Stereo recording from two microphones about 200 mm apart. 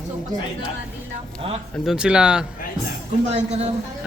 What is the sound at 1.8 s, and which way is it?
Speech, 5° right (ahead or behind).